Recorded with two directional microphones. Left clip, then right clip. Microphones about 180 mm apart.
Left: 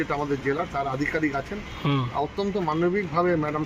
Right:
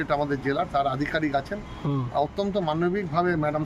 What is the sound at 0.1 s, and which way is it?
Speech, 25° right (ahead or behind).